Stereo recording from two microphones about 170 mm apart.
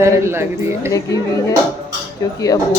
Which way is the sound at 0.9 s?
20° left (ahead or behind).